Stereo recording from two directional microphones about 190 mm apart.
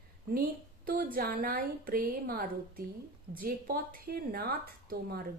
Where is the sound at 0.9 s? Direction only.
50° right (ahead or behind).